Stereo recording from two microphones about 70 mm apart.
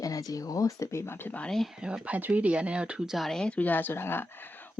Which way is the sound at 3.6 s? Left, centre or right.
Left.